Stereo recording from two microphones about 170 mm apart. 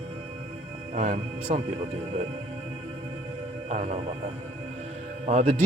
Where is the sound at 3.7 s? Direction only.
40° right (ahead or behind).